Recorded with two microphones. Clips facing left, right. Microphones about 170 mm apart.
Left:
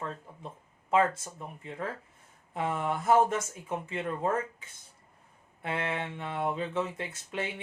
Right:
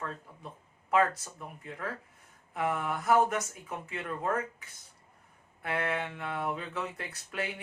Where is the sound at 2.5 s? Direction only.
25° left (ahead or behind).